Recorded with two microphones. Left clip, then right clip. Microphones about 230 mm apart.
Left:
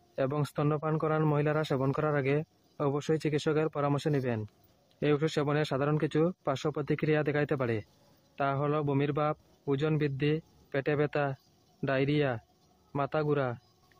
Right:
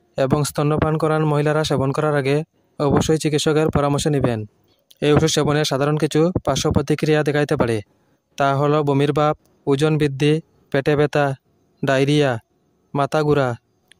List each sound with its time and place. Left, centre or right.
0.1 s speech: right